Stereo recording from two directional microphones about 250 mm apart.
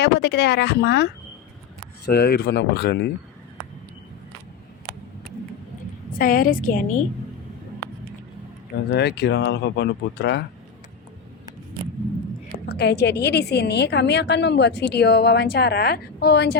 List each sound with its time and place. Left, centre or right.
0.0 s a woman's voice: left
6.1 s a woman's voice: left
8.9 s a woman's voice: left
12.6 s a woman's voice: left